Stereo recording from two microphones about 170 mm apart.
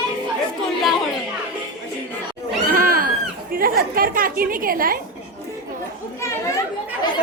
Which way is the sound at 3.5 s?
60° right (ahead or behind).